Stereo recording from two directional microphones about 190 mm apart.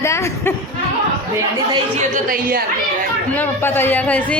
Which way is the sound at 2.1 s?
50° right (ahead or behind).